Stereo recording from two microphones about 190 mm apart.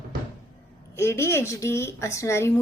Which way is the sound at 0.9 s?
15° left (ahead or behind).